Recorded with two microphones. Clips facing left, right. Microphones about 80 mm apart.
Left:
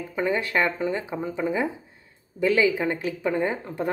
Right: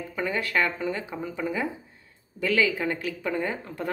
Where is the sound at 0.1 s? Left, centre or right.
Left.